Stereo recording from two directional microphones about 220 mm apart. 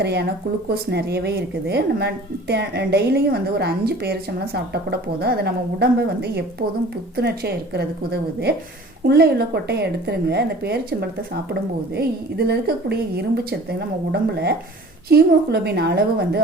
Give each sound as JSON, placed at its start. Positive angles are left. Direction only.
{"t": 0.0, "sound": "a woman's voice", "side_deg": -50}